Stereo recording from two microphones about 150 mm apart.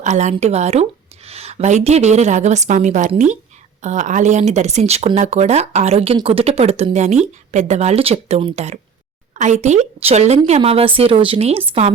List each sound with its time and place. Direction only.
0.0 s speech: 50° right (ahead or behind)